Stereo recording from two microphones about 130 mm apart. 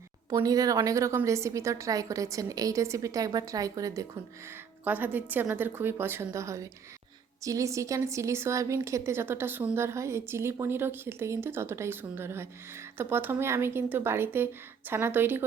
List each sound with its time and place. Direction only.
0.3 s speech: 25° right (ahead or behind)
4.9 s a woman's voice: 15° right (ahead or behind)